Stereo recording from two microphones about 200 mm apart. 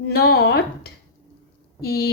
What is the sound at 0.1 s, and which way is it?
A woman's voice, 50° left (ahead or behind).